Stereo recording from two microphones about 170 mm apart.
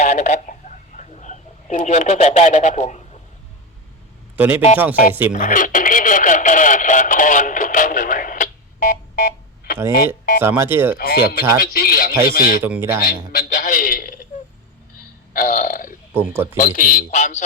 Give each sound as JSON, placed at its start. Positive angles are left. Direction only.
{"t": 0.0, "sound": "a sound", "side_deg": 45}
{"t": 4.4, "sound": "a man's voice", "side_deg": -10}
{"t": 5.3, "sound": "speech", "side_deg": 55}
{"t": 9.7, "sound": "speech", "side_deg": -15}
{"t": 10.9, "sound": "speech", "side_deg": 60}
{"t": 12.6, "sound": "speech", "side_deg": -15}
{"t": 13.1, "sound": "a man's voice", "side_deg": 55}
{"t": 15.3, "sound": "a man's voice", "side_deg": 50}
{"t": 16.3, "sound": "speech", "side_deg": -15}
{"t": 16.6, "sound": "a man's voice", "side_deg": 50}